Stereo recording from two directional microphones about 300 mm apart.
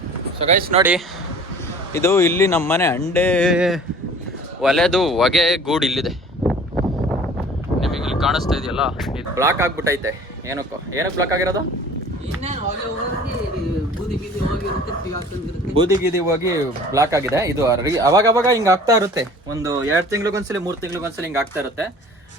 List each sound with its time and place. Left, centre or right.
0.3 s speech: right
0.8 s speech: centre
1.9 s speech: centre
15.7 s speech: centre